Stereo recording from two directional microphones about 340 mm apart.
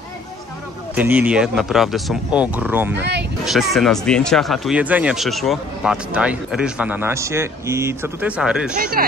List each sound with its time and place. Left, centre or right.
0.9 s speech: centre
3.0 s speech: right
3.4 s speech: centre